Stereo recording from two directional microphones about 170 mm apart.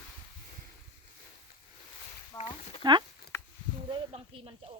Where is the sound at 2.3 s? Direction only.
20° left (ahead or behind).